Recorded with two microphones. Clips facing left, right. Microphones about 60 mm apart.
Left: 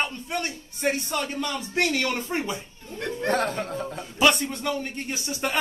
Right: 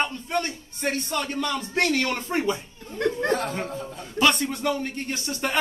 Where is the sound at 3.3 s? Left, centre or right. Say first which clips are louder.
Left 1 dB; left.